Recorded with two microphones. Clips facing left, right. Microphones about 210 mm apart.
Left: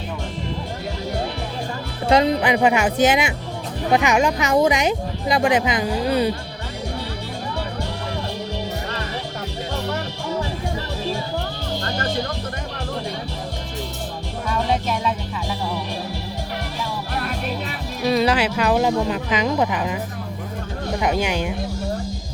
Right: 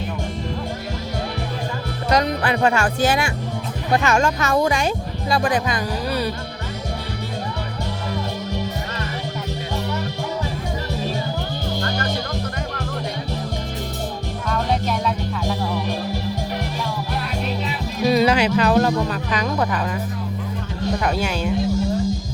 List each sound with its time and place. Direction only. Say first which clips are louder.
2.0 s speech: left 3 dB; 25° left (ahead or behind)
18.0 s speech: right 2 dB; centre (ahead or behind)
21.0 s speech: left 5 dB; 15° left (ahead or behind)